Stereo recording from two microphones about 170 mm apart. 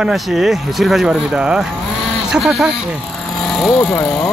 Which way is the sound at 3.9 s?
Centre (ahead or behind).